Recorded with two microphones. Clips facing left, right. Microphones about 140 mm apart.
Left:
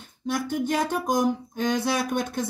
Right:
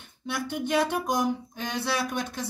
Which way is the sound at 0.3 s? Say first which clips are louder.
Left 2 dB; 45° left (ahead or behind).